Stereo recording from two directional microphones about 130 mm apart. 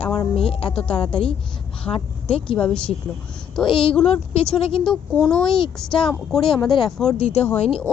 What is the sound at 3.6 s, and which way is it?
A woman's voice, 40° left (ahead or behind).